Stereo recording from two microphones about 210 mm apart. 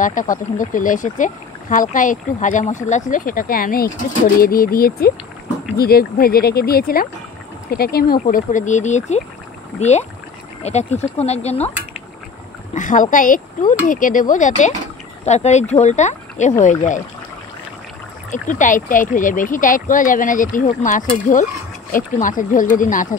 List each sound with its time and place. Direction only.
0.0 s speech: 40° left (ahead or behind)
12.7 s speech: 40° left (ahead or behind)
18.3 s speech: 35° left (ahead or behind)